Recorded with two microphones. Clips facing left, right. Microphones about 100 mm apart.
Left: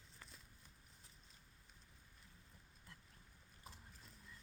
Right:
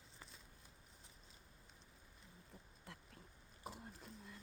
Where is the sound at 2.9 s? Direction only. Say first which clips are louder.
Right 7 dB; 70° right (ahead or behind).